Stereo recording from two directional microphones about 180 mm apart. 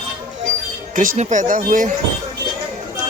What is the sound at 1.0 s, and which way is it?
Speech, 45° right (ahead or behind).